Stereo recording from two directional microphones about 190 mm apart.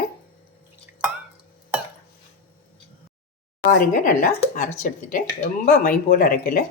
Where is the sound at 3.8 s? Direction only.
45° left (ahead or behind).